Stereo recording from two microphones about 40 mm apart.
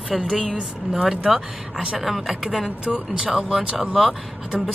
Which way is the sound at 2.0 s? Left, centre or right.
Centre.